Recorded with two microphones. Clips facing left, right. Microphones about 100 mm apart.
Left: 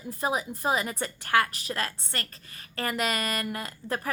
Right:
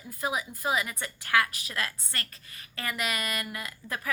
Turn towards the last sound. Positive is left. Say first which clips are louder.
# left 3 dB
turn(degrees=40)  # may be behind; listen again after turning